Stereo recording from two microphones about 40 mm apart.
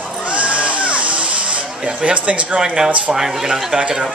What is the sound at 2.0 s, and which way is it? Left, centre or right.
Speech, right.